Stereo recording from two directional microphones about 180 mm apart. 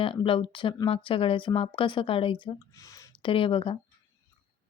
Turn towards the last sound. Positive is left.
turn(degrees=30)  # may be behind; listen again after turning